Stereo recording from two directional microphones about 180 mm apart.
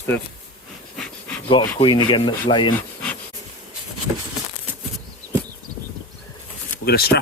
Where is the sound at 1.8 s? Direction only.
30° left (ahead or behind).